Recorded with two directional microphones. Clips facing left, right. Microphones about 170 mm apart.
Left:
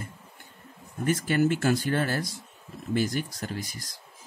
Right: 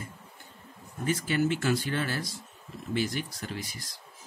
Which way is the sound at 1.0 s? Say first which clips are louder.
Left 3 dB; 50° left (ahead or behind).